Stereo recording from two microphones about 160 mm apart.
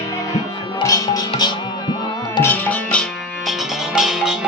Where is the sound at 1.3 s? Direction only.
30° left (ahead or behind).